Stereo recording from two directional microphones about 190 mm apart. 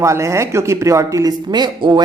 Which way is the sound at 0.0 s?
15° right (ahead or behind).